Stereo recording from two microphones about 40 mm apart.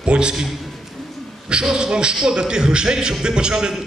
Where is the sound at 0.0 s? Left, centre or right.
Right.